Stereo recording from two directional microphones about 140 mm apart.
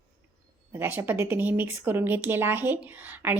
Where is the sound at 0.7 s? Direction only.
15° right (ahead or behind).